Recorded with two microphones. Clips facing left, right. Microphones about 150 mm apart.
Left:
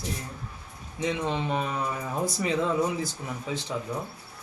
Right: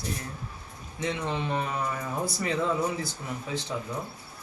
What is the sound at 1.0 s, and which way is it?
Speech, 15° left (ahead or behind).